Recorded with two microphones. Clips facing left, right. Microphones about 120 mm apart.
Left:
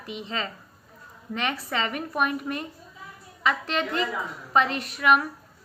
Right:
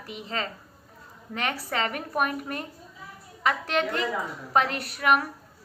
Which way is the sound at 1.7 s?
45° right (ahead or behind).